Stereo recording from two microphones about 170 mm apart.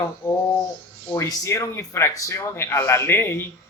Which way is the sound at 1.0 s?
15° left (ahead or behind).